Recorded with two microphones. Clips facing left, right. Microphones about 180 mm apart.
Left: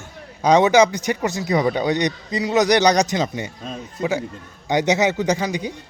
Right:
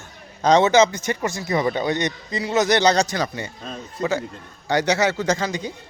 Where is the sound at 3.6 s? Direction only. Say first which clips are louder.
Even; 5° left (ahead or behind).